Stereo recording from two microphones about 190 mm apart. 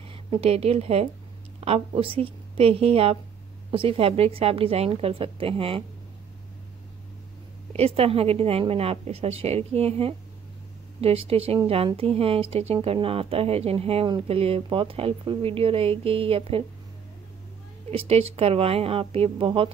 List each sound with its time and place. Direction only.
0.1 s a woman's voice: 30° right (ahead or behind)
7.7 s speech: 30° right (ahead or behind)
17.9 s speech: 30° right (ahead or behind)